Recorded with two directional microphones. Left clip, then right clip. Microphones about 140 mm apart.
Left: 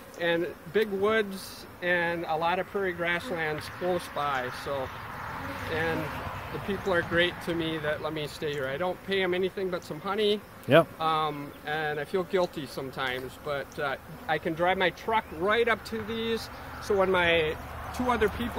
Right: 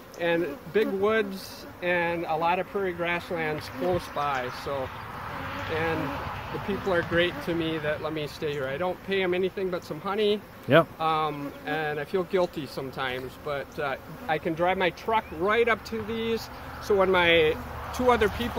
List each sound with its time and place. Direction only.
0.2 s speech: 5° left (ahead or behind)
6.9 s speech: centre (ahead or behind)
16.8 s speech: 20° right (ahead or behind)
17.1 s speech: 45° right (ahead or behind)
17.9 s speech: 90° right